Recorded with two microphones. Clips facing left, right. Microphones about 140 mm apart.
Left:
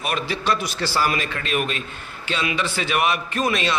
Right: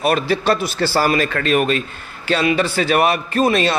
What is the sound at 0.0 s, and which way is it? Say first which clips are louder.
A man's voice: right 8 dB; 40° right (ahead or behind).